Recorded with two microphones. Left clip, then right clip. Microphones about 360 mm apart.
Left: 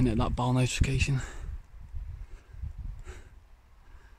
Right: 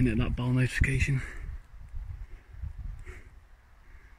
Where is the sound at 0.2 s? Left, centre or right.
Centre.